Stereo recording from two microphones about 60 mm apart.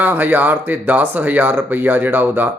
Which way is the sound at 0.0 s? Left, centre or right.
Right.